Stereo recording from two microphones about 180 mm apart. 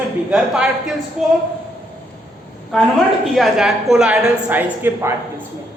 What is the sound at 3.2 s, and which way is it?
A woman's voice, centre (ahead or behind).